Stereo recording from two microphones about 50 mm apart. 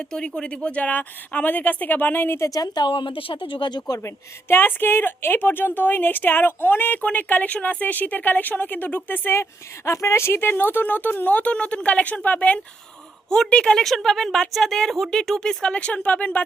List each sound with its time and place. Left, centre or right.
0.0 s speech: centre; by 2.4 s left
4.4 s speech: left
9.3 s speech: left
13.5 s speech: centre
13.7 s speech: centre
15.7 s speech: left